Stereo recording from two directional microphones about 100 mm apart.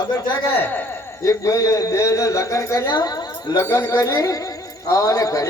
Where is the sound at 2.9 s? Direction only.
40° left (ahead or behind).